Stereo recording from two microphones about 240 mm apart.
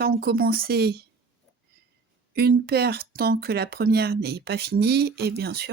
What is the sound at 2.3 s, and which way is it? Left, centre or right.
Speech, right.